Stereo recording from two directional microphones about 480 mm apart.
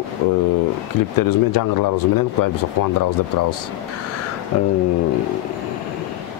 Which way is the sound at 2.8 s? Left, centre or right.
Left.